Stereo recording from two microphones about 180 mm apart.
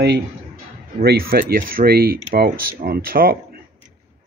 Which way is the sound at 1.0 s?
55° right (ahead or behind).